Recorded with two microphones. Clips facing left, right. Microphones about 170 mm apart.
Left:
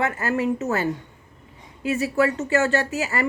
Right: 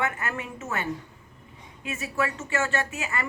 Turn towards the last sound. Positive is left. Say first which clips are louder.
# left 6 dB
turn(degrees=35)  # may be behind; listen again after turning